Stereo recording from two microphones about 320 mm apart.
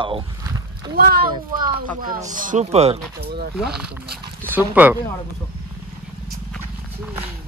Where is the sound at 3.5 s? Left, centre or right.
Centre.